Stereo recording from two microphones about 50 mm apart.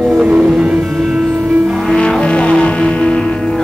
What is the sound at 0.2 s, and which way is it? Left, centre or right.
Music, right.